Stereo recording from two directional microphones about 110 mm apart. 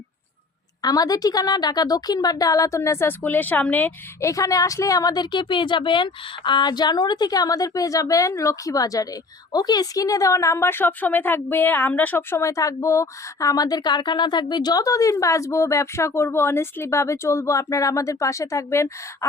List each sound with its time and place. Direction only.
0.8 s a woman's voice: 35° left (ahead or behind); by 4.3 s 15° left (ahead or behind)
4.3 s a woman's voice: 30° left (ahead or behind)